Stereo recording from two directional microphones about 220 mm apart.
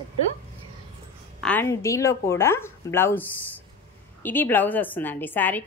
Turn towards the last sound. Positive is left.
turn(degrees=10)  # may be behind; listen again after turning